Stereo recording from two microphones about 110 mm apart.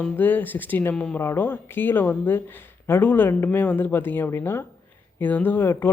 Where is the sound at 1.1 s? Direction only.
20° left (ahead or behind).